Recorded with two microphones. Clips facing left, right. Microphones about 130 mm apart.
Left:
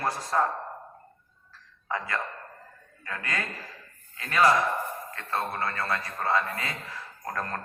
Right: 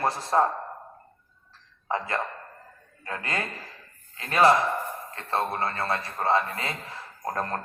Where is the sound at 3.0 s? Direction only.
30° right (ahead or behind).